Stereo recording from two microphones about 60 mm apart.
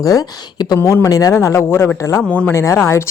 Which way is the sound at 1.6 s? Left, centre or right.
Left.